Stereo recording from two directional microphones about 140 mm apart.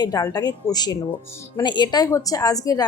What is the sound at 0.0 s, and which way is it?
A woman's voice, 25° left (ahead or behind).